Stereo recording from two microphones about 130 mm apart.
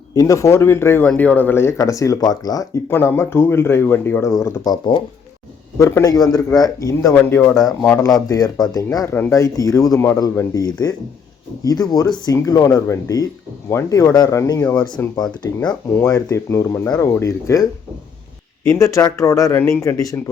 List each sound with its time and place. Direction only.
0.1 s speech: 25° left (ahead or behind)
2.9 s speech: 20° left (ahead or behind)
18.7 s speech: 25° left (ahead or behind)